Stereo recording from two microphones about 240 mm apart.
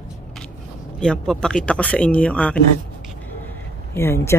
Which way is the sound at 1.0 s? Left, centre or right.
Centre.